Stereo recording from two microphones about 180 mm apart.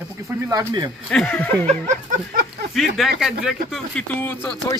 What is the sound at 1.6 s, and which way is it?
Speech, 40° right (ahead or behind).